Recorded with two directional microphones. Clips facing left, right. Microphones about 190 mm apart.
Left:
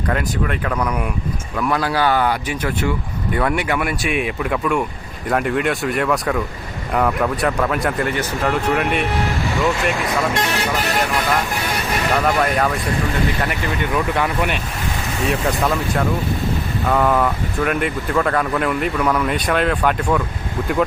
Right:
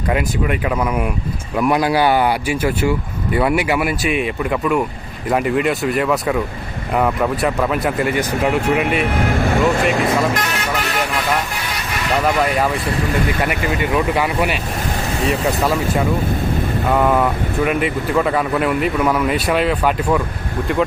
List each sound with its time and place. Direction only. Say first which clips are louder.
0.1 s speech: right 3 dB; 10° right (ahead or behind)
9.2 s speech: right 4 dB; 55° right (ahead or behind)
12.4 s speech: right 1 dB; 5° right (ahead or behind)